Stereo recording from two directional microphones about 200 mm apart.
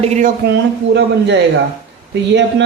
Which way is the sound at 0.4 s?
60° right (ahead or behind).